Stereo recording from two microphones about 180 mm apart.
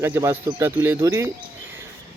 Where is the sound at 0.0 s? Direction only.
15° right (ahead or behind).